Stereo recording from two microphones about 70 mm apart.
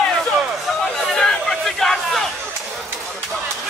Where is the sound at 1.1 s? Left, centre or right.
Centre.